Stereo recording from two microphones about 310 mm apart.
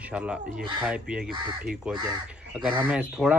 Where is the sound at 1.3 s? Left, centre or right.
Centre.